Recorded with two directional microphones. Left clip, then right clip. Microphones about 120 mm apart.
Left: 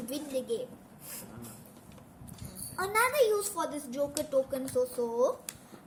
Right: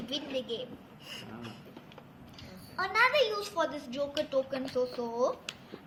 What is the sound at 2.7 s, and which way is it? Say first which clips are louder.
A woman's voice: right 2 dB; 90° left.